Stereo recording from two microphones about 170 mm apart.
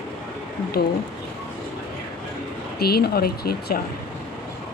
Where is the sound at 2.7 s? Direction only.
65° left (ahead or behind).